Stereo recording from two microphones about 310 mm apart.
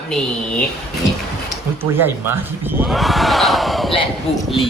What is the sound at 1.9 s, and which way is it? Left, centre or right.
Speech, centre.